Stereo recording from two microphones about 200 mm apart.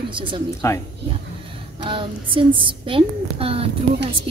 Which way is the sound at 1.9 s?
25° right (ahead or behind).